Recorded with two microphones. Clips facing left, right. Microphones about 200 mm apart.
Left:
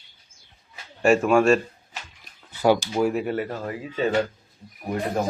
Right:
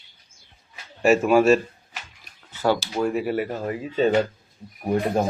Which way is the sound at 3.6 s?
25° right (ahead or behind).